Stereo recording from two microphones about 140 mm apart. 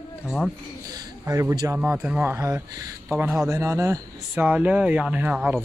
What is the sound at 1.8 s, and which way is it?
Speech, 10° right (ahead or behind).